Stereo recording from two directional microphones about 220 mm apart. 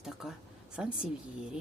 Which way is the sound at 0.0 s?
Centre (ahead or behind).